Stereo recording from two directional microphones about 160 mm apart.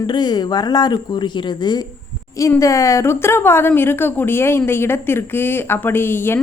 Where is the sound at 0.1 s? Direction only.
25° left (ahead or behind).